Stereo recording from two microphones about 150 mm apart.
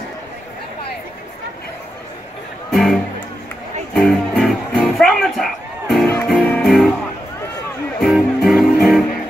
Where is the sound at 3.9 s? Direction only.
5° left (ahead or behind).